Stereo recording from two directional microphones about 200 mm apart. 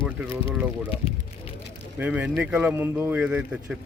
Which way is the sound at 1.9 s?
5° right (ahead or behind).